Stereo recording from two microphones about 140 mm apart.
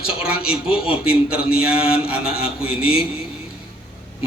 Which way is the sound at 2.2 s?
5° right (ahead or behind).